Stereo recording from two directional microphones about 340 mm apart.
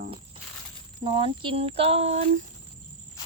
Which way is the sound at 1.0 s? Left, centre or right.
Centre.